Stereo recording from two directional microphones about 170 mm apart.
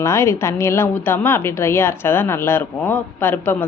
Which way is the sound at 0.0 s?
15° left (ahead or behind).